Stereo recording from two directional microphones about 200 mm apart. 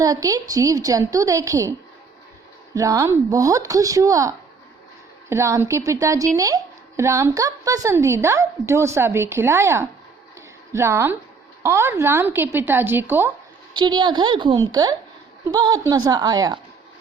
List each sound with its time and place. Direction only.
0.0 s a woman's voice: 15° right (ahead or behind)
2.7 s a woman's voice: 15° right (ahead or behind)
13.7 s a woman's voice: 20° right (ahead or behind)